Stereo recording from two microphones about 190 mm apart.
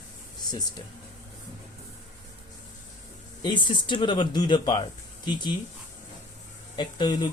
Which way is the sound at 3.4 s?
25° left (ahead or behind).